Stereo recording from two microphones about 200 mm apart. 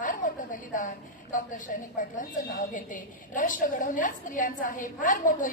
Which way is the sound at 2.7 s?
40° left (ahead or behind).